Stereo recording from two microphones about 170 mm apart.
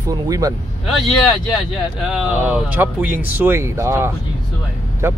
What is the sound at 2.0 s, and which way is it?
Speech, 5° right (ahead or behind).